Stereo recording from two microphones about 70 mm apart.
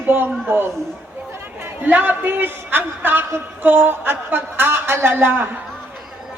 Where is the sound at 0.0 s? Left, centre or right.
Right.